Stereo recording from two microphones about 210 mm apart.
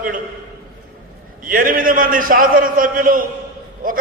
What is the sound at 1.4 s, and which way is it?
A man's voice, 40° right (ahead or behind).